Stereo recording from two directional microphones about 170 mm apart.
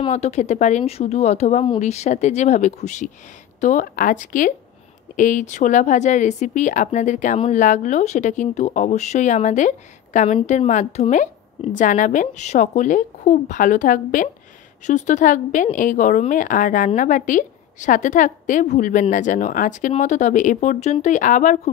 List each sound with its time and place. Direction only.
0.0 s a woman's voice: 40° left (ahead or behind)